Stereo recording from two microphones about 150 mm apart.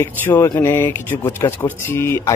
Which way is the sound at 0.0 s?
15° left (ahead or behind).